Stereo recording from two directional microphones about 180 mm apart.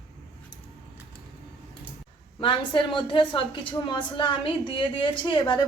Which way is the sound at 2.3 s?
25° left (ahead or behind).